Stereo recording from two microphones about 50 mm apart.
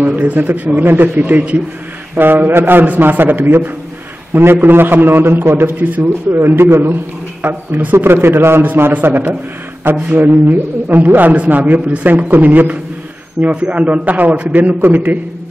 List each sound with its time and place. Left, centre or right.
0.0 s a man's voice: right
2.1 s a man's voice: right
13.4 s a man's voice: right